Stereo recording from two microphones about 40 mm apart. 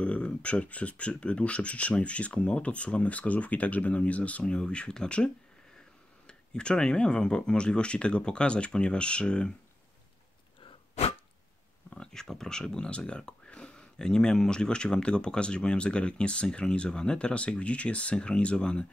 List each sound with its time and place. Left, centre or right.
0.0 s speech: left
4.5 s speech: left
12.0 s speech: centre